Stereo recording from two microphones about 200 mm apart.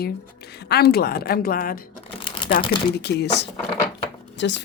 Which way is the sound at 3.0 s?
55° left (ahead or behind).